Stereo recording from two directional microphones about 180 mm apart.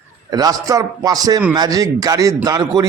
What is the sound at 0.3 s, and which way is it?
A man's voice, 20° right (ahead or behind).